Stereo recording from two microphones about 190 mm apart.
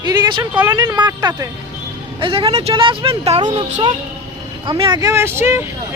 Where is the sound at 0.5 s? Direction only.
10° right (ahead or behind).